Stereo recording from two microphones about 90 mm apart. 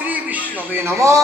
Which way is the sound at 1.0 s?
35° right (ahead or behind).